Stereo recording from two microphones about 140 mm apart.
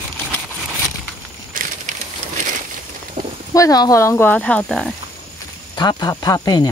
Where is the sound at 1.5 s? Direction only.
75° right (ahead or behind).